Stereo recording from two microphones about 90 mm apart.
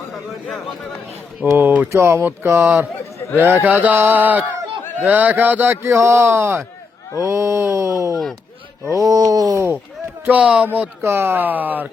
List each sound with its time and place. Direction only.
0.4 s speech: centre (ahead or behind)
1.5 s speech: 20° right (ahead or behind)
1.9 s speech: 30° right (ahead or behind)
10.2 s speech: 15° right (ahead or behind)
11.0 s speech: 25° right (ahead or behind)